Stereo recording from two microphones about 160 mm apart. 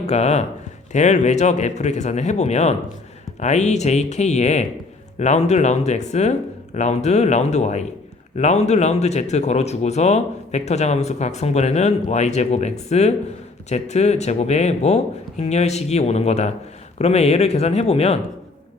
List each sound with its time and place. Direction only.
0.1 s speech: 45° left (ahead or behind)